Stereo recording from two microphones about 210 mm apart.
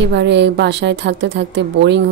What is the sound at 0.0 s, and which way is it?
A woman's voice, 55° right (ahead or behind).